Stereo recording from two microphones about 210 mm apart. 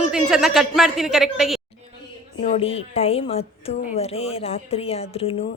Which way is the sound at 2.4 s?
30° left (ahead or behind).